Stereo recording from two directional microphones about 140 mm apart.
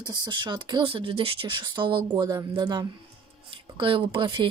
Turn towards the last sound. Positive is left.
turn(degrees=-35)  # may be behind; listen again after turning